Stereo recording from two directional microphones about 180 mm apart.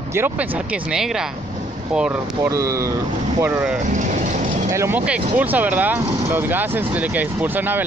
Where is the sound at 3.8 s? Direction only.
45° right (ahead or behind).